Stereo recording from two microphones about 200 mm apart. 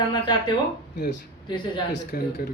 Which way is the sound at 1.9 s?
55° left (ahead or behind).